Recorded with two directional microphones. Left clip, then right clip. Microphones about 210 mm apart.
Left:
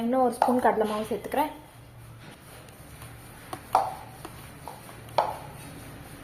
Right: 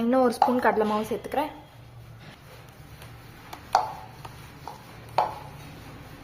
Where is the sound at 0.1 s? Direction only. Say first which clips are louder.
Right 2 dB; 20° right (ahead or behind); by 1.5 s 5° right (ahead or behind).